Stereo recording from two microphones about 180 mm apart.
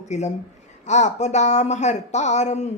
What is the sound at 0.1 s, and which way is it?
Speech, 40° left (ahead or behind).